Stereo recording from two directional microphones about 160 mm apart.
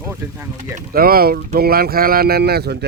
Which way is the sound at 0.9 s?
70° right (ahead or behind).